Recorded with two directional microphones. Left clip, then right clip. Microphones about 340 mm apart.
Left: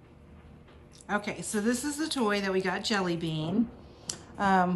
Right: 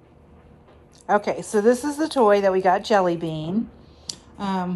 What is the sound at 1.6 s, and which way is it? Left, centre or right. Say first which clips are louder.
Speech: right 12 dB; right.